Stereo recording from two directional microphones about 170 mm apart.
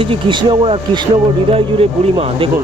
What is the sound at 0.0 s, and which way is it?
Speech, 30° right (ahead or behind).